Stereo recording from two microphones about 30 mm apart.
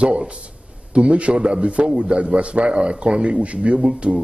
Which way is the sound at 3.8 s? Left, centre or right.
Right.